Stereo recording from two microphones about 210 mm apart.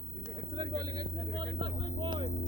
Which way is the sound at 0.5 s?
20° right (ahead or behind).